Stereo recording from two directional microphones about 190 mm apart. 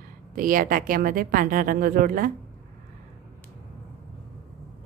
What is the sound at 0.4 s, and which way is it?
Speech, 45° right (ahead or behind).